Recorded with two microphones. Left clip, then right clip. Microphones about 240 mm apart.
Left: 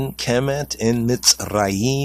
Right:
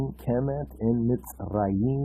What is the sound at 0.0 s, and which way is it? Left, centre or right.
Speech, left.